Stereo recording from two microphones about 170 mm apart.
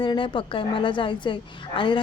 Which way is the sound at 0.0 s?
30° left (ahead or behind).